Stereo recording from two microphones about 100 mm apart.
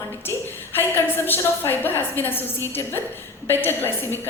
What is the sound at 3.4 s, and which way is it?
Speech, 20° left (ahead or behind).